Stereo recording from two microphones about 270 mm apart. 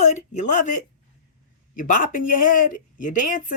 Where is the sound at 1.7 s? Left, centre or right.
Left.